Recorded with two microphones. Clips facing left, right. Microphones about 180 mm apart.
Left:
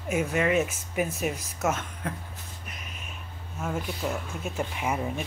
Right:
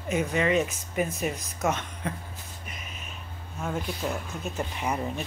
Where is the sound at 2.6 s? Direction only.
Centre (ahead or behind).